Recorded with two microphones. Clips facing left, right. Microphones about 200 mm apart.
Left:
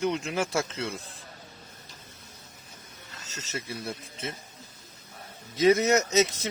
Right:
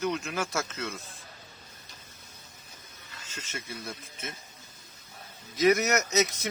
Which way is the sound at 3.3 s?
30° left (ahead or behind).